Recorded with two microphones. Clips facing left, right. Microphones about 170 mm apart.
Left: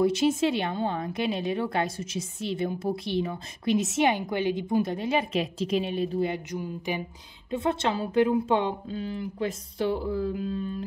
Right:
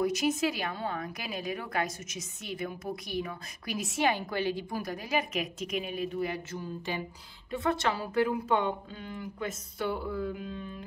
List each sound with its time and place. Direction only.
0.0 s a woman's voice: 30° left (ahead or behind)